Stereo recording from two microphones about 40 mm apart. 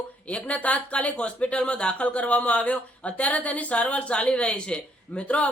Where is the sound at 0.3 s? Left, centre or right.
Left.